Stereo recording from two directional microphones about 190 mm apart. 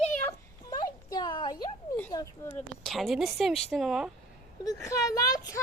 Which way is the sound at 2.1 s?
20° left (ahead or behind).